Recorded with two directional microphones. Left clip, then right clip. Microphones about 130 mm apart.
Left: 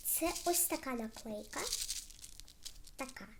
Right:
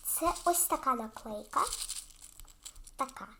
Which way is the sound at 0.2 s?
20° left (ahead or behind).